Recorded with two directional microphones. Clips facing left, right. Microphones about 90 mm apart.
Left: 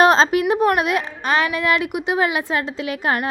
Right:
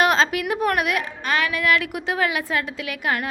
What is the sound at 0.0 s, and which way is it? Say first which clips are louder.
A woman's voice: left 5 dB; 30° left (ahead or behind).